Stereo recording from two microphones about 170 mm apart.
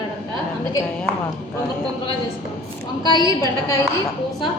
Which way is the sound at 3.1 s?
20° left (ahead or behind).